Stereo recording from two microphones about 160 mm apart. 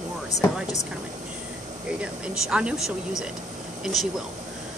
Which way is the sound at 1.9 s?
5° right (ahead or behind).